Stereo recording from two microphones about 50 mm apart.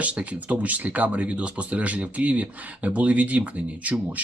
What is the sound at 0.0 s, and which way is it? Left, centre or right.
Speech, right.